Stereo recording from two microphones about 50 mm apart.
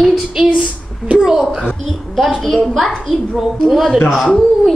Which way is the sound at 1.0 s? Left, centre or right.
Centre.